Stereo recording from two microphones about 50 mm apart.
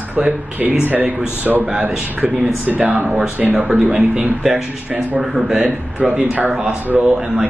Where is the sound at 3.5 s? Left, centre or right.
Centre.